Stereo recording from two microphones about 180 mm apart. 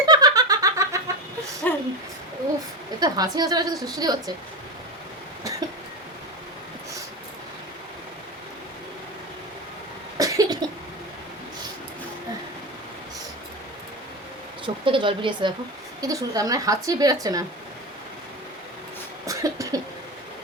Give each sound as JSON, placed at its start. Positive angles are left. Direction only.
{"t": 0.0, "sound": "giggle", "side_deg": -20}
{"t": 1.7, "sound": "a sound", "side_deg": 10}
{"t": 3.0, "sound": "a woman's voice", "side_deg": -20}
{"t": 5.4, "sound": "cough", "side_deg": -20}
{"t": 10.2, "sound": "cough", "side_deg": -20}
{"t": 14.6, "sound": "a woman's voice", "side_deg": -30}
{"t": 19.2, "sound": "cough", "side_deg": -20}